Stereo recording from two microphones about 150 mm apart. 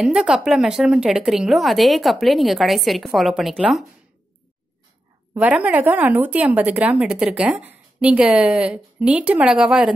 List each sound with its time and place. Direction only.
0.0 s speech: 5° right (ahead or behind)
5.3 s a woman's voice: 10° right (ahead or behind)